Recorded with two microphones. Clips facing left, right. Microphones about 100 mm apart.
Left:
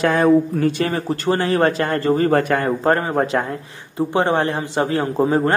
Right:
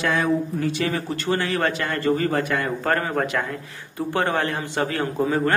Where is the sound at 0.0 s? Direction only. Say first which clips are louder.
Left 7 dB; 40° left (ahead or behind).